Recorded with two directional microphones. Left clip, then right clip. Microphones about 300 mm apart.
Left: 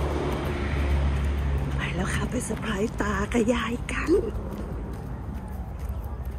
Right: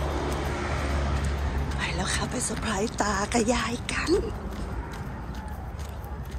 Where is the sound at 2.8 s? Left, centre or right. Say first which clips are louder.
Right 1 dB; centre.